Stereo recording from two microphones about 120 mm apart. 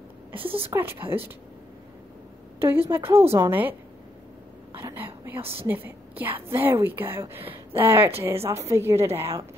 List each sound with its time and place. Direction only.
0.4 s speech: 50° right (ahead or behind)
0.7 s a woman's voice: 20° right (ahead or behind)
2.9 s a woman's voice: 20° right (ahead or behind)
4.7 s a sound: 20° right (ahead or behind)
5.7 s a woman's voice: 15° right (ahead or behind)